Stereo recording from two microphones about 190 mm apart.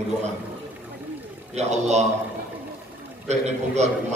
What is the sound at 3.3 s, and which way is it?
Speech, 35° right (ahead or behind).